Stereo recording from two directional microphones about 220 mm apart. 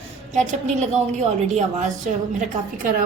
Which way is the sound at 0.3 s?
30° right (ahead or behind).